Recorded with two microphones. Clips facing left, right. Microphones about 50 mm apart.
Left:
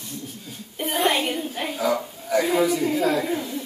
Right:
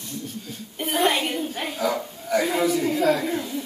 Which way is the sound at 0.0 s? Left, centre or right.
Centre.